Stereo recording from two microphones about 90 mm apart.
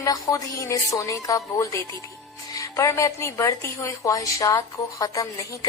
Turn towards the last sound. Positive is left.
turn(degrees=40)  # may be behind; listen again after turning